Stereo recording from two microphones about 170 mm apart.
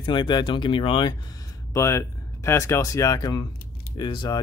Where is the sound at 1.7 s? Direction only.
15° left (ahead or behind).